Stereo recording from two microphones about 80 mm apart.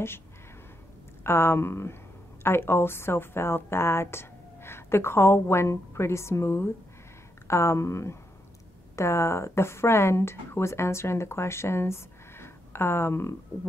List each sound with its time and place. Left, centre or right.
1.2 s a woman's voice: left